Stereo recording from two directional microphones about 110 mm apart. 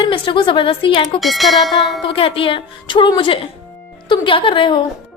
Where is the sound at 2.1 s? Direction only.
55° left (ahead or behind).